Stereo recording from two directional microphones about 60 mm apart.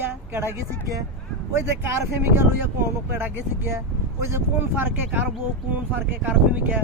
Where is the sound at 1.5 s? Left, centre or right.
Right.